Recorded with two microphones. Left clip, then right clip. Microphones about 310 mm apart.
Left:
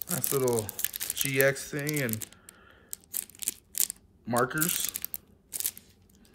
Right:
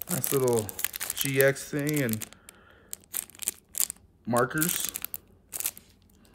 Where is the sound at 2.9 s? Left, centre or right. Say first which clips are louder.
Right 1 dB; centre.